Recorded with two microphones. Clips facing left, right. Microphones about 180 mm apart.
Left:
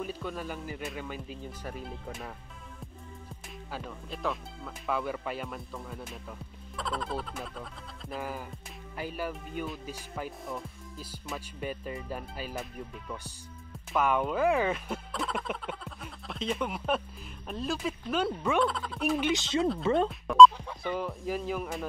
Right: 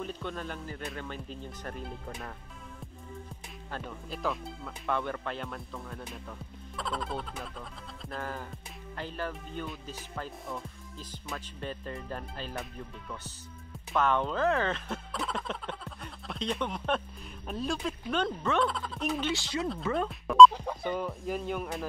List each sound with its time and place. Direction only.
0.0 s speech: 5° left (ahead or behind)
3.7 s speech: centre (ahead or behind)
13.9 s speech: 10° left (ahead or behind)
19.3 s speech: 20° left (ahead or behind)
20.1 s speech: centre (ahead or behind)